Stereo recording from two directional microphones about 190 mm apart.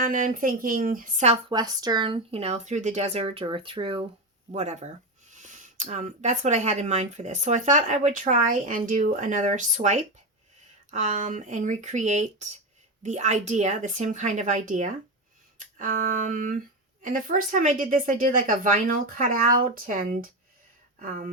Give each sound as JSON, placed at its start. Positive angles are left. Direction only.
{"t": 0.0, "sound": "a woman's voice", "side_deg": -45}
{"t": 1.5, "sound": "speech", "side_deg": -20}
{"t": 15.5, "sound": "a sound", "side_deg": -45}
{"t": 17.0, "sound": "a woman's voice", "side_deg": -45}